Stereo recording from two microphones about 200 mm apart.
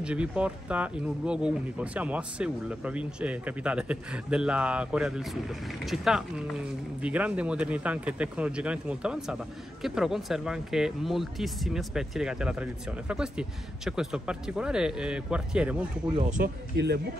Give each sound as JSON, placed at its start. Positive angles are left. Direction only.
{"t": 0.0, "sound": "speech", "side_deg": -5}
{"t": 16.2, "sound": "speech", "side_deg": -40}
{"t": 16.7, "sound": "speech", "side_deg": -60}